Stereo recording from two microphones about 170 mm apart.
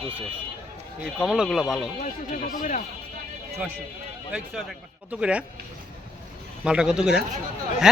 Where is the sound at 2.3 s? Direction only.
50° left (ahead or behind).